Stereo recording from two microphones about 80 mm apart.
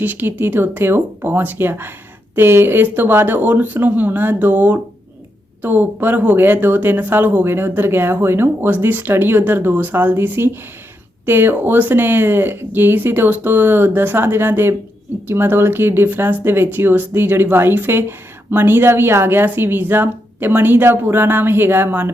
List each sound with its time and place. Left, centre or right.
0.0 s speech: right